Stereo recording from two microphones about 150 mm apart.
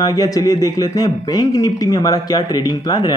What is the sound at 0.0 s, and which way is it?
A man's voice, 25° left (ahead or behind).